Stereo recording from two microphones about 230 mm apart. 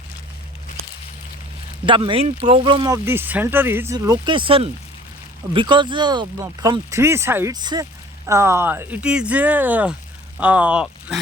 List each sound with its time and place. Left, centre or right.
1.9 s speech: right; by 11.2 s centre